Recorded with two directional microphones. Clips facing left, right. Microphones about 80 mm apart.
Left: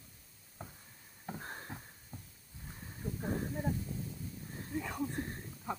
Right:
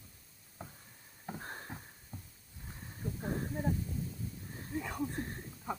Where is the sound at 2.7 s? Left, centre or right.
Centre.